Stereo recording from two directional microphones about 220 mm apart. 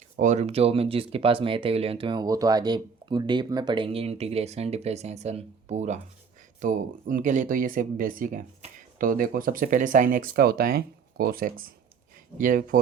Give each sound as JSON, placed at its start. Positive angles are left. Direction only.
{"t": 0.2, "sound": "speech", "side_deg": -30}